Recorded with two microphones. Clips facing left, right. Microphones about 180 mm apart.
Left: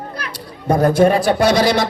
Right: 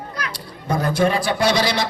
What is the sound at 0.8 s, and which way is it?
A man's voice, 55° left (ahead or behind).